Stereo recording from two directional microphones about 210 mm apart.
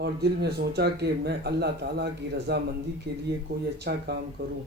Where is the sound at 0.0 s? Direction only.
50° right (ahead or behind).